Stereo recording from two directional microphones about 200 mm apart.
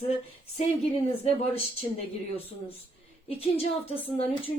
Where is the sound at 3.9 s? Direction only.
25° left (ahead or behind).